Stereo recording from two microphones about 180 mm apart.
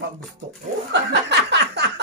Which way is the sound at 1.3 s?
70° right (ahead or behind).